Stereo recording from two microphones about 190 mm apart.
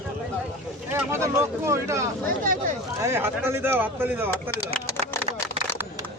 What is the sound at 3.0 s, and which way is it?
Speech, 15° right (ahead or behind).